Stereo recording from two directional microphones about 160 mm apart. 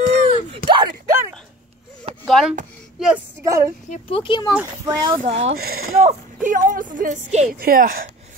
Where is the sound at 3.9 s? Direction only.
35° left (ahead or behind).